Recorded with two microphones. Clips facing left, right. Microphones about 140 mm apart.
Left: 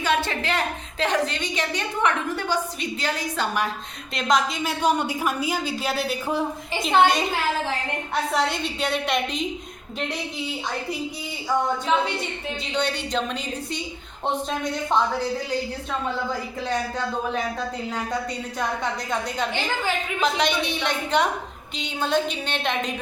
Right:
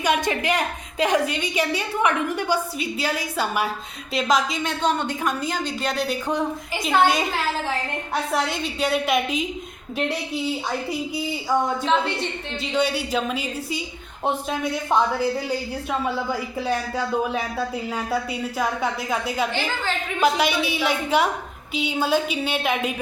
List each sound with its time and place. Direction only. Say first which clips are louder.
0.0 s a woman's voice: right 2 dB; 15° right (ahead or behind)
4.8 s a woman's voice: left 1 dB; 10° left (ahead or behind)
8.3 s a woman's voice: left 1 dB; centre (ahead or behind)
12.7 s a woman's voice: right 3 dB; 5° right (ahead or behind)
20.1 s a woman's voice: right 4 dB; 5° right (ahead or behind)